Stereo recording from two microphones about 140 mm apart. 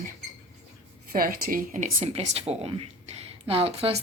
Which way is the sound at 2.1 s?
50° right (ahead or behind).